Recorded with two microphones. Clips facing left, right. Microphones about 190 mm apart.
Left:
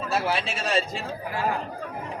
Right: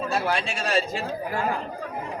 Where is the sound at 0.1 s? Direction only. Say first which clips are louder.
Left 3 dB; 5° left (ahead or behind).